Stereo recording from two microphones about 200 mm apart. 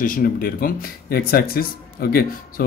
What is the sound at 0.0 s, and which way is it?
Speech, 45° left (ahead or behind).